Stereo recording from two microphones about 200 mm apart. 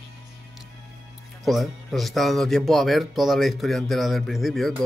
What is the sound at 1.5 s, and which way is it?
Speech, centre (ahead or behind).